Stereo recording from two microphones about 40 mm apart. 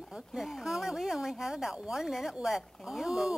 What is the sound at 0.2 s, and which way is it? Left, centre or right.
Speech, centre.